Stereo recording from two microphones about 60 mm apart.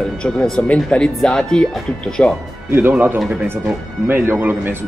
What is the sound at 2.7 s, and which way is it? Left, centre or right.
Speech, right.